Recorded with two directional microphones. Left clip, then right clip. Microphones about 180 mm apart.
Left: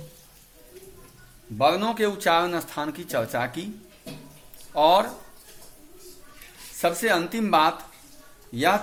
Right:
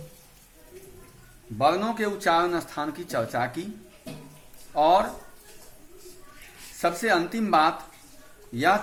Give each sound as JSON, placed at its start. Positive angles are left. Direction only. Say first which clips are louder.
{"t": 1.5, "sound": "a man's voice", "louder": "left 2 dB", "side_deg": 20}
{"t": 4.7, "sound": "speech", "louder": "left 1 dB", "side_deg": 25}
{"t": 6.7, "sound": "a man's voice", "louder": "left 1 dB", "side_deg": 20}